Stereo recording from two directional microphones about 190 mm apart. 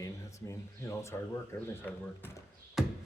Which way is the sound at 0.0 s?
15° left (ahead or behind).